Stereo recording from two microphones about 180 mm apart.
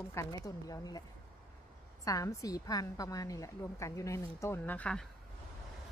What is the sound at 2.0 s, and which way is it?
A woman's voice, 20° left (ahead or behind).